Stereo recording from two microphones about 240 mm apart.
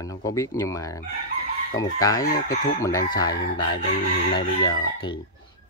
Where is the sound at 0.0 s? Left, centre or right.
Centre.